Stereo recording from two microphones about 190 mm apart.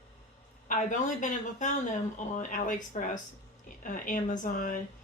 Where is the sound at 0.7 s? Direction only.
40° left (ahead or behind).